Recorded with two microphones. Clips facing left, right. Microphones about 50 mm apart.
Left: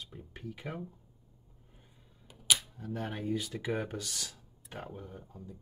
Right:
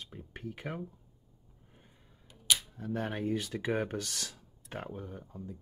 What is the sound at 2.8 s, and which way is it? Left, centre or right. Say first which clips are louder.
Speech: right 3 dB; right.